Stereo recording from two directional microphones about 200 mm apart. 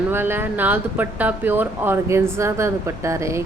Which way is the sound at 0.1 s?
10° right (ahead or behind).